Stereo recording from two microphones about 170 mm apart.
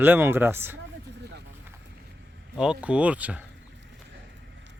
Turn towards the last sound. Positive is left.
turn(degrees=-10)  # may be behind; listen again after turning